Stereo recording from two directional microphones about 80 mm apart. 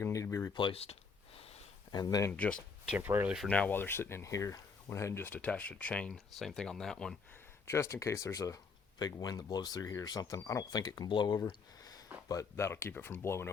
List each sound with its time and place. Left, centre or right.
0.0 s a sound: left
1.9 s speech: left
2.3 s speech: centre
3.0 s speech: right
3.4 s speech: centre
6.4 s speech: centre
7.7 s speech: left
11.1 s speech: left
11.8 s a sound: left
12.3 s speech: left